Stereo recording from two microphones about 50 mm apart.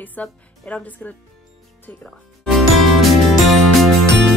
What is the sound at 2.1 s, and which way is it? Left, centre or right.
Music, centre.